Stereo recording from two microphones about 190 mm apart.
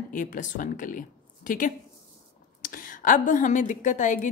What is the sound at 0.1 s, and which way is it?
A woman's voice, 45° left (ahead or behind).